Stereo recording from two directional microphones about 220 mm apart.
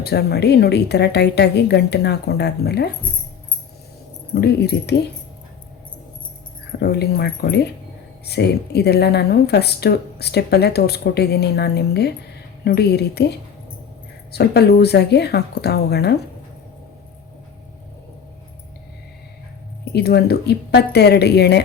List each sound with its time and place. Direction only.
0.0 s speech: 45° left (ahead or behind)
4.4 s speech: 50° left (ahead or behind)
6.8 s speech: 45° left (ahead or behind)
19.8 s speech: 45° left (ahead or behind)